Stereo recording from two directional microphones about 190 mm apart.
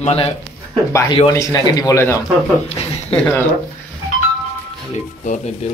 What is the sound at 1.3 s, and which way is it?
Speech, 20° left (ahead or behind).